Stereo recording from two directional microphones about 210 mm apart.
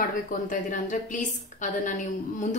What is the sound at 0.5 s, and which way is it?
A woman's voice, 40° left (ahead or behind).